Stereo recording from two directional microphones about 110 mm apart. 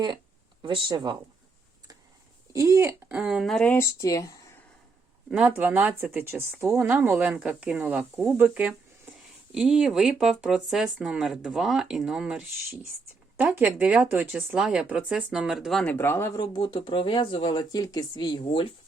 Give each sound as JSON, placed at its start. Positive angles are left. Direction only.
{"t": 0.6, "sound": "speech", "side_deg": -50}
{"t": 2.5, "sound": "speech", "side_deg": -30}
{"t": 3.1, "sound": "speech", "side_deg": -5}
{"t": 3.7, "sound": "speech", "side_deg": 25}
{"t": 5.3, "sound": "speech", "side_deg": -10}
{"t": 7.1, "sound": "speech", "side_deg": -10}
{"t": 15.8, "sound": "speech", "side_deg": 15}
{"t": 16.4, "sound": "speech", "side_deg": 40}